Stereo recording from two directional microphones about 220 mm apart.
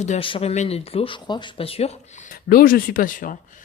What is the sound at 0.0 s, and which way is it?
Speech, 30° left (ahead or behind).